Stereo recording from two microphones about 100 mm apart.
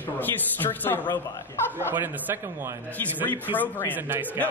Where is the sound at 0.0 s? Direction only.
20° left (ahead or behind).